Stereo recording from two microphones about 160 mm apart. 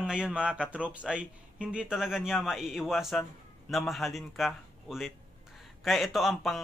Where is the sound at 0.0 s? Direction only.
5° right (ahead or behind).